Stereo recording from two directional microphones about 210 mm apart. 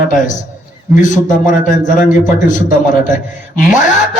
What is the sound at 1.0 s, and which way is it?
Speech, 35° left (ahead or behind).